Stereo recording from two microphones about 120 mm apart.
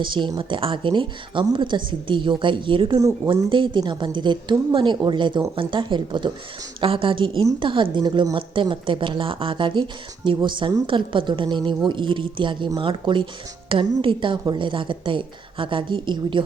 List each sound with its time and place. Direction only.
0.0 s a woman's voice: 40° right (ahead or behind)